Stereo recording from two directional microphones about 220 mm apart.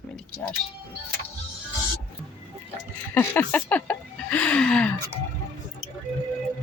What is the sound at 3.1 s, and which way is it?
Speech, 10° left (ahead or behind).